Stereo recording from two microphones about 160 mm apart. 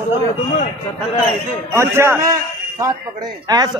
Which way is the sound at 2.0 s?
15° right (ahead or behind).